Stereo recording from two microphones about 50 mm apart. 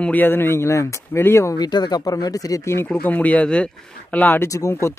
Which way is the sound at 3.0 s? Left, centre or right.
Left.